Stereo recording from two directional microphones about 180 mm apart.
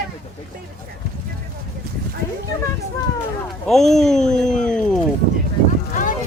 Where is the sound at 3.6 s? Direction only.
Centre (ahead or behind).